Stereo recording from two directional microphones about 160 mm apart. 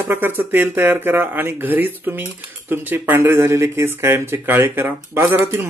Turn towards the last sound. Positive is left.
turn(degrees=-15)  # may be behind; listen again after turning